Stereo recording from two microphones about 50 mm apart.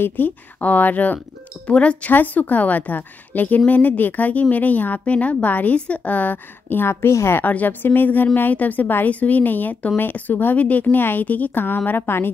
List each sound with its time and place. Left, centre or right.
0.0 s a woman's voice: left
2.1 s a woman's voice: left
7.4 s a woman's voice: left